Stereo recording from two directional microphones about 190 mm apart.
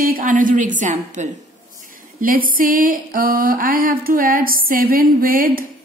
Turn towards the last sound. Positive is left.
turn(degrees=-50)  # may be behind; listen again after turning